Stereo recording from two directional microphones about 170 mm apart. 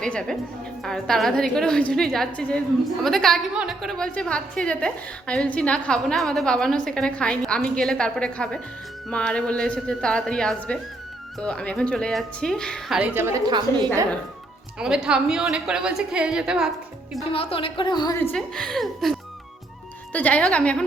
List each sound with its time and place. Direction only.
0.0 s a woman's voice: 5° left (ahead or behind)
13.0 s a woman's voice: 10° right (ahead or behind)
13.5 s a woman's voice: 20° right (ahead or behind)
14.8 s a woman's voice: 5° right (ahead or behind)
17.3 s a woman's voice: 35° left (ahead or behind)
18.2 s a woman's voice: 5° left (ahead or behind)
20.1 s a woman's voice: 10° left (ahead or behind)